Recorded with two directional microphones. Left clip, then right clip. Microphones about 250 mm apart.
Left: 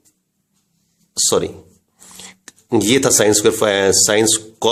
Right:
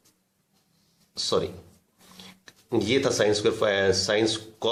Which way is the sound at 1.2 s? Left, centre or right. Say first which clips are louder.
Left 9 dB; left.